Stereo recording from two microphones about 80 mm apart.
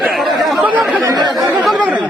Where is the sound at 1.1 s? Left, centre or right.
Right.